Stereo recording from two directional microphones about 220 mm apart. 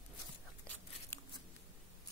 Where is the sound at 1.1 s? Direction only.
10° left (ahead or behind).